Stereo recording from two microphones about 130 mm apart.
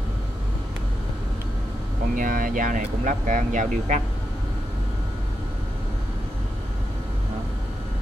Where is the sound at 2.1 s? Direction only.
90° right; by 4.0 s 70° right (ahead or behind).